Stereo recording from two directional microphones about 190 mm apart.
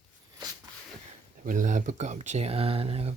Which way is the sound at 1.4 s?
40° right (ahead or behind).